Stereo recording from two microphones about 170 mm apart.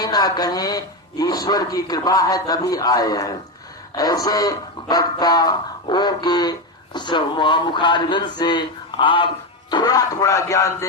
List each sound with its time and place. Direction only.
0.0 s speech: 25° left (ahead or behind)